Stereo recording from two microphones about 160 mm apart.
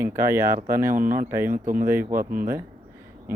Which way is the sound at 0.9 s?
60° right (ahead or behind).